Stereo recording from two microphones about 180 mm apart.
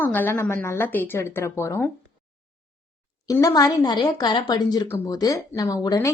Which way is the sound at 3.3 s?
20° left (ahead or behind).